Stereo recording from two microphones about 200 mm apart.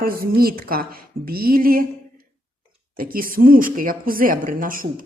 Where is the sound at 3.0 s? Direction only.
45° right (ahead or behind).